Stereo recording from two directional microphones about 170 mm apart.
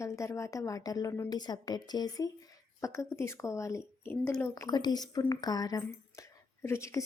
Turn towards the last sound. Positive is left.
turn(degrees=15)  # may be behind; listen again after turning